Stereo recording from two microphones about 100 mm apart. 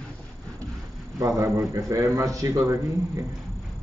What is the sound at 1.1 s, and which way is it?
A man's voice, 30° right (ahead or behind).